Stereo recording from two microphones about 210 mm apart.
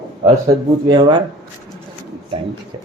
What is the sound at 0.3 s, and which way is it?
Speech, 20° right (ahead or behind).